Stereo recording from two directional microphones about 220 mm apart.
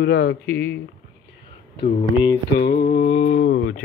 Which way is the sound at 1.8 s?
25° left (ahead or behind).